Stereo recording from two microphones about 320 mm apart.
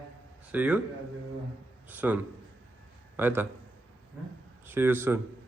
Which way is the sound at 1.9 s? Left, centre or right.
Centre.